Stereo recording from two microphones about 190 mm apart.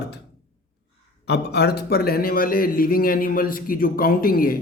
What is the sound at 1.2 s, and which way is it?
Speech, 60° left (ahead or behind).